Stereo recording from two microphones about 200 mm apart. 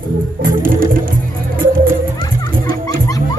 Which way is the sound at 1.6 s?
45° right (ahead or behind).